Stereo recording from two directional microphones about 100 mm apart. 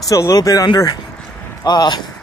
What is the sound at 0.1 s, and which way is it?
Speech, 35° left (ahead or behind).